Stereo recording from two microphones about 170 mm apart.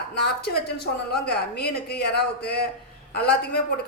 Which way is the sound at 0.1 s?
75° left (ahead or behind).